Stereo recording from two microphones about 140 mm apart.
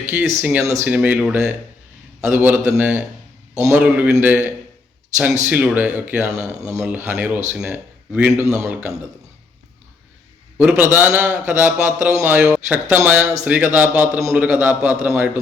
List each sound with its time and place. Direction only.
0.0 s a man's voice: 10° right (ahead or behind)
8.3 s a man's voice: 20° right (ahead or behind)
10.6 s a man's voice: 10° right (ahead or behind)